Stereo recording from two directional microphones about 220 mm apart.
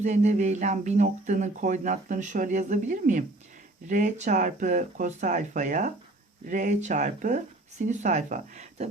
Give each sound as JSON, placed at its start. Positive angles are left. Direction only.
{"t": 0.0, "sound": "speech", "side_deg": -30}